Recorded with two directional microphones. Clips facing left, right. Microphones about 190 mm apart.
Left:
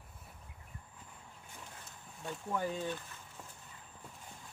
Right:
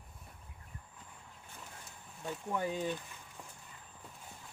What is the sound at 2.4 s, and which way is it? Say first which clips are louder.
Speech: even; 15° right (ahead or behind).